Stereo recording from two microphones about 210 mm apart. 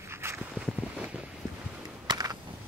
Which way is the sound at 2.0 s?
20° right (ahead or behind).